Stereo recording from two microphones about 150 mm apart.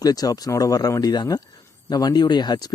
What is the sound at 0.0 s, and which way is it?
Speech, 25° left (ahead or behind).